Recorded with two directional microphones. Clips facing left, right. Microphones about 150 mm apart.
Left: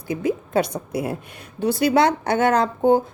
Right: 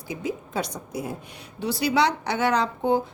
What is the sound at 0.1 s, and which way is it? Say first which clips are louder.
A woman's voice: left 8 dB; 55° left (ahead or behind).